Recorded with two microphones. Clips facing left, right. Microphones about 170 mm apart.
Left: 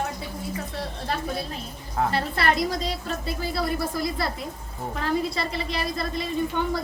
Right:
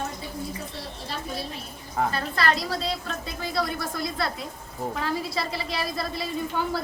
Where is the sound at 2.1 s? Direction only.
25° left (ahead or behind).